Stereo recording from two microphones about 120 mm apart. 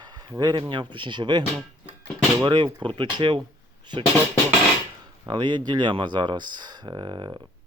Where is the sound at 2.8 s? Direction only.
45° right (ahead or behind).